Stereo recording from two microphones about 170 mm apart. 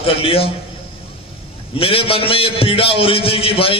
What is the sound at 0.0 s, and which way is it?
Speech, 35° left (ahead or behind).